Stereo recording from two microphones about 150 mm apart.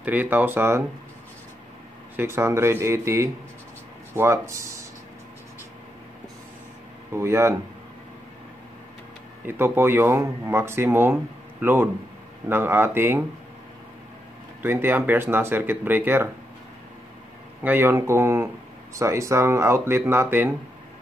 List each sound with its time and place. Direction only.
0.0 s speech: 10° right (ahead or behind)
2.1 s speech: 15° right (ahead or behind)
7.1 s speech: 15° right (ahead or behind)
9.5 s speech: 15° right (ahead or behind)
14.6 s speech: 15° right (ahead or behind)
17.6 s speech: 15° right (ahead or behind)